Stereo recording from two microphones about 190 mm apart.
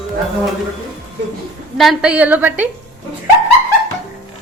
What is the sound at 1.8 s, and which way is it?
Speech, centre (ahead or behind).